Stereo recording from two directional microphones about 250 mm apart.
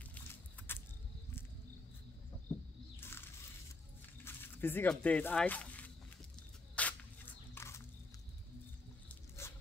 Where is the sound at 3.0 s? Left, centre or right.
Centre.